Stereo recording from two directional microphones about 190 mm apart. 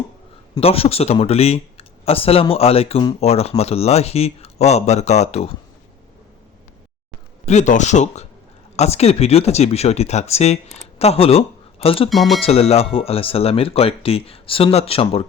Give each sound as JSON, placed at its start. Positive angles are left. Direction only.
{"t": 0.6, "sound": "speech", "side_deg": 30}
{"t": 7.4, "sound": "speech", "side_deg": 40}
{"t": 12.0, "sound": "speech", "side_deg": 0}
{"t": 12.4, "sound": "speech", "side_deg": 30}